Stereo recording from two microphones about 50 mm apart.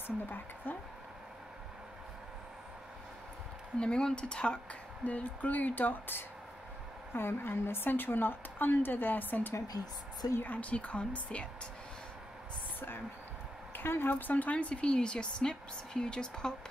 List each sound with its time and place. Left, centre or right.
0.0 s a woman's voice: left
3.8 s a woman's voice: centre
5.0 s a woman's voice: left
13.7 s a woman's voice: left
14.3 s a woman's voice: left